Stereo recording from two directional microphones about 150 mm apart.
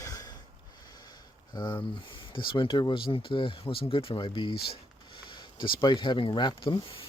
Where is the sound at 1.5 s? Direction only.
30° left (ahead or behind).